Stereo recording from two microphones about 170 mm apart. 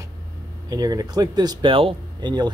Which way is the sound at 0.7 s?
20° right (ahead or behind).